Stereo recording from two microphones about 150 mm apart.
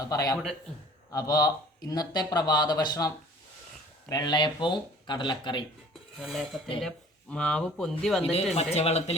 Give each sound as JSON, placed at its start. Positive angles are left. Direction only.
{"t": 0.0, "sound": "speech", "side_deg": 25}
{"t": 4.1, "sound": "speech", "side_deg": 30}
{"t": 6.1, "sound": "speech", "side_deg": 0}
{"t": 8.2, "sound": "speech", "side_deg": 40}